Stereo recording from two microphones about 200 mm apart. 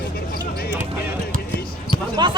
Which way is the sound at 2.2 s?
25° right (ahead or behind).